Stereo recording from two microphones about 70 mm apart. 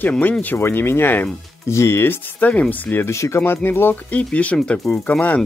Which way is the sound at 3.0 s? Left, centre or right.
Left.